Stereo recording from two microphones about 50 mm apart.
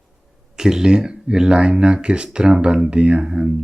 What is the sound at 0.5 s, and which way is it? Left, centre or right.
Speech, centre.